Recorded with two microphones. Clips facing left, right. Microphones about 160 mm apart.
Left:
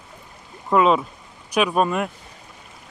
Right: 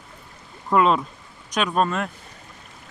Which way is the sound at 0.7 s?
Centre (ahead or behind).